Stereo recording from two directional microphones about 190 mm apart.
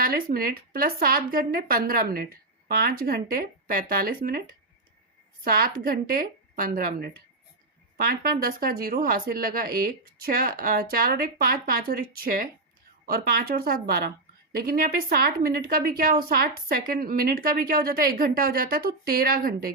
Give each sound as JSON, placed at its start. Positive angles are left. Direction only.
{"t": 0.0, "sound": "speech", "side_deg": -50}
{"t": 5.5, "sound": "speech", "side_deg": -50}
{"t": 8.1, "sound": "speech", "side_deg": -50}